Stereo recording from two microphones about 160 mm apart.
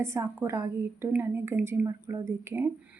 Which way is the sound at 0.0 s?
15° right (ahead or behind).